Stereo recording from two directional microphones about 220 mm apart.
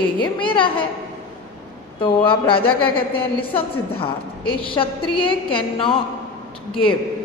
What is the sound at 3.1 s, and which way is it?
A woman's voice, 25° left (ahead or behind).